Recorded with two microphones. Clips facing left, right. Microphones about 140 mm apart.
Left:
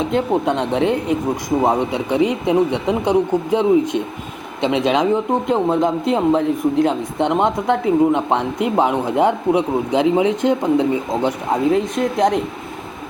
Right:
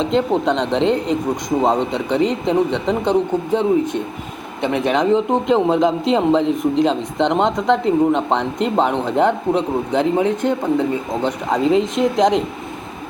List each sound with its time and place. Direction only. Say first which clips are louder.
0.2 s speech: even; 10° left (ahead or behind)
5.1 s a man's voice: right 2 dB; centre (ahead or behind)